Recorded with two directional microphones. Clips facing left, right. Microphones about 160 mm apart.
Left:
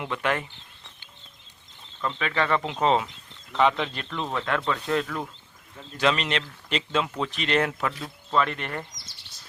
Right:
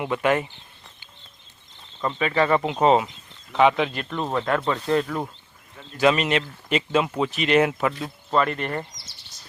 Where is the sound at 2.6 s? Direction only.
5° right (ahead or behind).